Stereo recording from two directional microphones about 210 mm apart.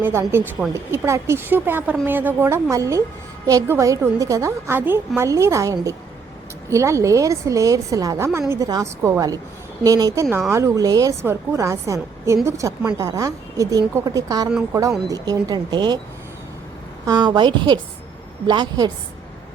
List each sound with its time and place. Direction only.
0.0 s a woman's voice: 10° right (ahead or behind)
17.1 s speech: 20° right (ahead or behind)